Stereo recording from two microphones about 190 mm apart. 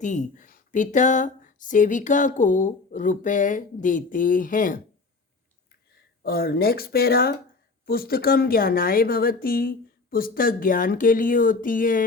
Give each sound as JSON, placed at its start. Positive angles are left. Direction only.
{"t": 0.0, "sound": "speech", "side_deg": 40}
{"t": 6.2, "sound": "speech", "side_deg": 50}